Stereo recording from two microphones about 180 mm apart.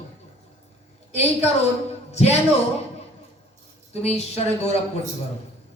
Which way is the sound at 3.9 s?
35° left (ahead or behind).